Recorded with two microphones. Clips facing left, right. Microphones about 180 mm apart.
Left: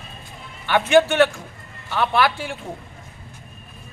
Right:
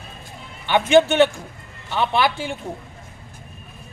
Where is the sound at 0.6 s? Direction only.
20° right (ahead or behind).